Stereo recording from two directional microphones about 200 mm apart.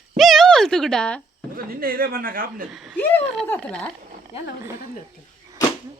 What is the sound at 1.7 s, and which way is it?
Speech, 50° right (ahead or behind).